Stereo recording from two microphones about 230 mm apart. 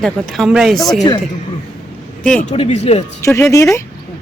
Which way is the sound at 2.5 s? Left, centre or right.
Left.